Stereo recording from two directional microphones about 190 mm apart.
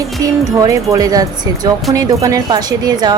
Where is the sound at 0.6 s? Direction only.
15° right (ahead or behind).